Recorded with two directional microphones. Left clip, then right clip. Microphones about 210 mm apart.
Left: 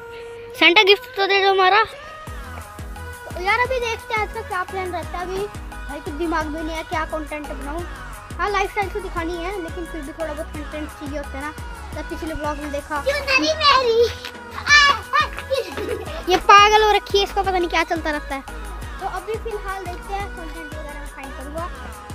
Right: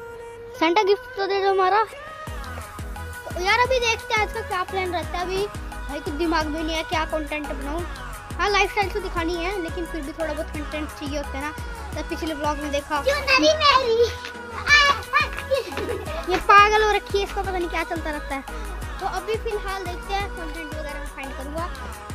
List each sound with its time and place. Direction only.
0.6 s speech: centre (ahead or behind)
3.3 s a child's voice: 10° right (ahead or behind)
13.2 s a child's voice: 25° right (ahead or behind)
13.6 s speech: 10° left (ahead or behind)
14.6 s music: 15° left (ahead or behind)
16.3 s speech: 10° left (ahead or behind)
19.1 s speech: 5° right (ahead or behind)